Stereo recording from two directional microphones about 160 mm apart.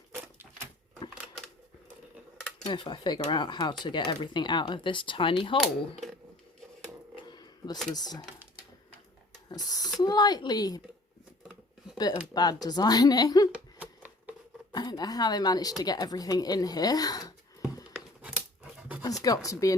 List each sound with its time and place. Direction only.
2.6 s speech: 30° left (ahead or behind)
7.3 s a sound: 25° left (ahead or behind)
7.9 s speech: 25° left (ahead or behind)
9.5 s speech: 25° left (ahead or behind)
11.9 s speech: 25° left (ahead or behind)
13.5 s a sound: 10° right (ahead or behind)
14.7 s a woman's voice: 25° left (ahead or behind)
18.2 s dog: 10° right (ahead or behind)
19.0 s speech: 25° left (ahead or behind)